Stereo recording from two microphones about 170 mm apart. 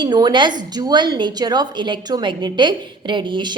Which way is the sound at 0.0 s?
25° right (ahead or behind).